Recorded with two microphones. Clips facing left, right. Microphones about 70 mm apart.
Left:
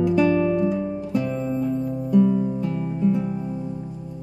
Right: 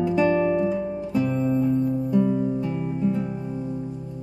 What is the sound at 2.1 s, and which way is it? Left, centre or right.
Music, centre.